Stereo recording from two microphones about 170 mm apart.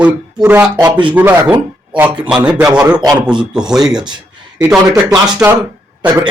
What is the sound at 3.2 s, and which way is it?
Speech, 5° right (ahead or behind).